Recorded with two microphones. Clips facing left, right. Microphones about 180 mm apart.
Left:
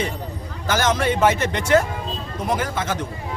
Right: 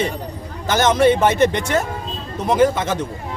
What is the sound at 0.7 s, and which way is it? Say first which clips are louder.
Speech: right 6 dB; 20° right (ahead or behind).